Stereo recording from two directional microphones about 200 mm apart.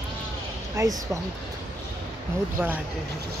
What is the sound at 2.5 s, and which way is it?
Speech, 10° right (ahead or behind).